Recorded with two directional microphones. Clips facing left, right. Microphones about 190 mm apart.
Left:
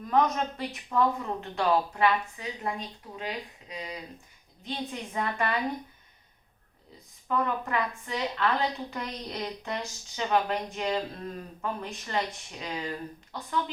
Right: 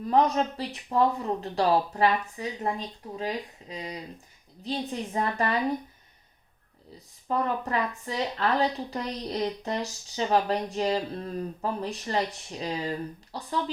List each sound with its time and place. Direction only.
0.0 s speech: 30° right (ahead or behind)
7.3 s speech: 35° right (ahead or behind)